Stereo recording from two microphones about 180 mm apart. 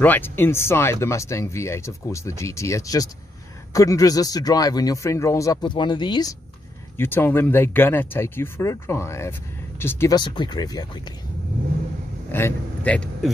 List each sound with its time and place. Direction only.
0.0 s speech: 10° left (ahead or behind)
7.0 s speech: 10° left (ahead or behind)
12.3 s speech: 10° left (ahead or behind)